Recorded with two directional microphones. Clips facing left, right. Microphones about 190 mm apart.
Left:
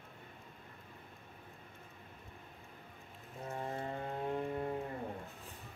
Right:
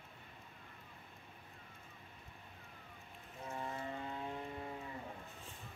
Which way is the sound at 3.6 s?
45° left (ahead or behind).